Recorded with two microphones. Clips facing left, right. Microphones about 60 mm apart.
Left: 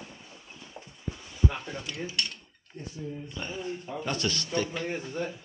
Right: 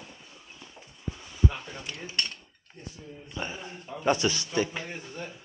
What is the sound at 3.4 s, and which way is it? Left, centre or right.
Speech, right.